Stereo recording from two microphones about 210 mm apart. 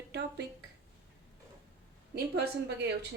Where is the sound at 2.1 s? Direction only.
50° right (ahead or behind).